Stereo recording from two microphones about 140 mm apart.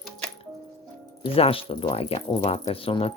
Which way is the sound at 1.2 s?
40° left (ahead or behind).